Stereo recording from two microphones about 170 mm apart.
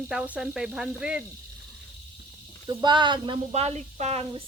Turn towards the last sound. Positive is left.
turn(degrees=-40)  # may be behind; listen again after turning